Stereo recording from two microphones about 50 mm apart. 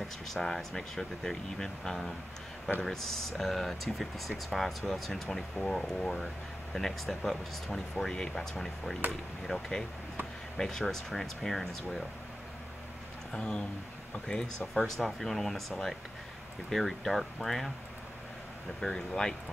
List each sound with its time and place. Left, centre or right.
0.3 s speech: centre
7.9 s speech: centre
13.3 s speech: centre
16.7 s speech: centre
18.8 s speech: centre